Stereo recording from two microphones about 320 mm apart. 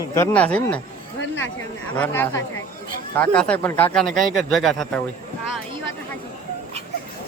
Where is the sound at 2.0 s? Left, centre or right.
Centre.